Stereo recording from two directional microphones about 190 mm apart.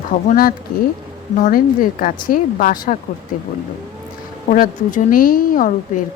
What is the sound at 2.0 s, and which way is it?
Speech, 45° left (ahead or behind).